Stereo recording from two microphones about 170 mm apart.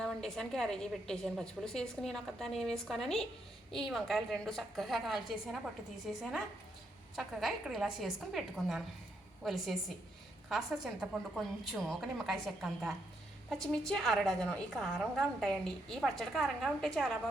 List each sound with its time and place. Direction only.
0.0 s a woman's voice: 5° left (ahead or behind)
11.1 s a woman's voice: centre (ahead or behind)